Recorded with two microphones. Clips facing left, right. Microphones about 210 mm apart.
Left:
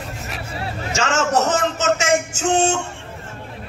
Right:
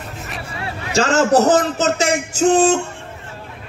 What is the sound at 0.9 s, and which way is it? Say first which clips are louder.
A man's voice: right 6 dB; 35° right (ahead or behind).